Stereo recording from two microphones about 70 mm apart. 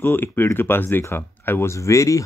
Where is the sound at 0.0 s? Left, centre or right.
Left.